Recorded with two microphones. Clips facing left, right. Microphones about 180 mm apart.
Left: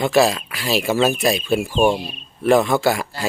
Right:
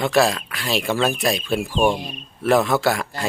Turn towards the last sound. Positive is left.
turn(degrees=0)  # may be behind; listen again after turning